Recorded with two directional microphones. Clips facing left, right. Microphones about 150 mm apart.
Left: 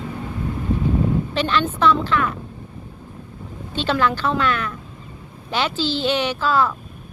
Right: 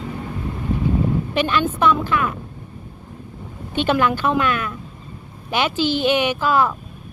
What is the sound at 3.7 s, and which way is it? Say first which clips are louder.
Speech: right 2 dB; 15° right (ahead or behind).